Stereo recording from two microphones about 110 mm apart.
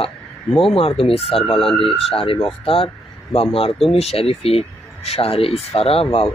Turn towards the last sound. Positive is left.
turn(degrees=60)  # may be behind; listen again after turning